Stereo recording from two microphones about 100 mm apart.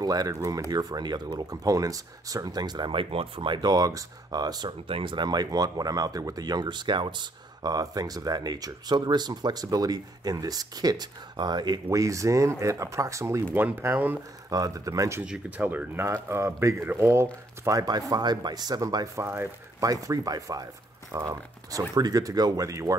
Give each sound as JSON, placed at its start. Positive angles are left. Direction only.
{"t": 0.0, "sound": "speech", "side_deg": -40}
{"t": 13.6, "sound": "speech", "side_deg": -20}
{"t": 14.5, "sound": "speech", "side_deg": -35}
{"t": 15.2, "sound": "speech", "side_deg": -10}
{"t": 17.6, "sound": "speech", "side_deg": -40}
{"t": 19.2, "sound": "speech", "side_deg": -25}
{"t": 19.9, "sound": "speech", "side_deg": -35}